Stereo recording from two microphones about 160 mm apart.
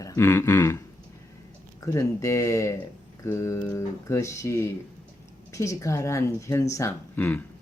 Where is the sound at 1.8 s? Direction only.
20° left (ahead or behind).